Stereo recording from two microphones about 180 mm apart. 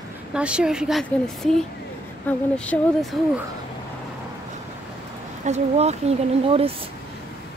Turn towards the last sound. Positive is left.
turn(degrees=-30)  # may be behind; listen again after turning